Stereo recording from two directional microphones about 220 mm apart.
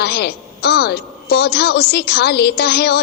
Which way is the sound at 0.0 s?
50° left (ahead or behind).